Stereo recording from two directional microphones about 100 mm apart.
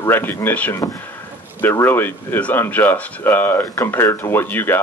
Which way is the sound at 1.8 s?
20° left (ahead or behind).